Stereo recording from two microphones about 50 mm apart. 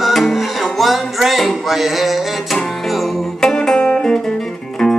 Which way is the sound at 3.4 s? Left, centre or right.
Centre.